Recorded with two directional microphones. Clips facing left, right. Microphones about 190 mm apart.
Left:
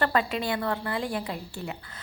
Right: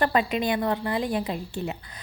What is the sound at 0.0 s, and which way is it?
A woman's voice, 20° right (ahead or behind).